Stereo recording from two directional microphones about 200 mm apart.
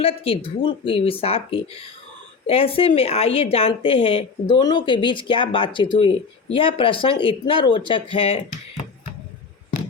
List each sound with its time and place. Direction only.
0.0 s speech: 25° left (ahead or behind)